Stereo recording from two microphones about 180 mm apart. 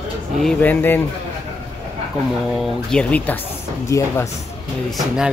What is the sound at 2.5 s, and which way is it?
Speech, 5° left (ahead or behind).